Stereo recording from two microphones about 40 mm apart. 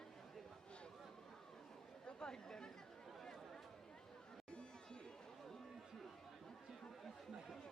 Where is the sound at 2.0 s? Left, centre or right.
Left.